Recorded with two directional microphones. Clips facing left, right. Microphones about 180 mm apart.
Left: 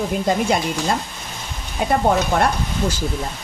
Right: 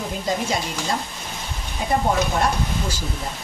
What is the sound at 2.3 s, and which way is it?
Speech, 60° left (ahead or behind).